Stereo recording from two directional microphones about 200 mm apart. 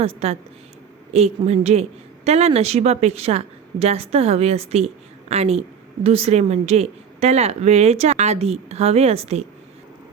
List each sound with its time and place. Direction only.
0.0 s a woman's voice: 30° right (ahead or behind)